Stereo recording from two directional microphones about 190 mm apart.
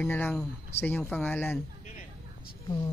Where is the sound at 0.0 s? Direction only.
10° left (ahead or behind).